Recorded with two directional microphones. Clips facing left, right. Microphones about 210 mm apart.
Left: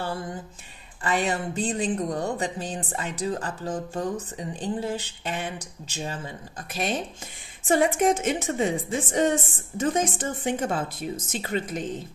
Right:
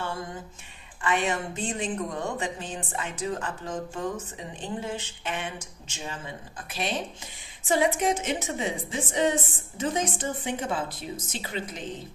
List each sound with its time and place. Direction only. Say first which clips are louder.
1.0 s a woman's voice: left 1 dB; 35° left (ahead or behind)